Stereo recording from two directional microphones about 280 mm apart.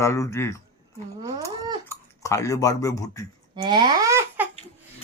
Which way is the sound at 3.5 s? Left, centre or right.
Centre.